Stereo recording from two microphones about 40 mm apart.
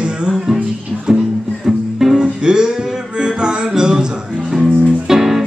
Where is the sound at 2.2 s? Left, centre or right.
Centre.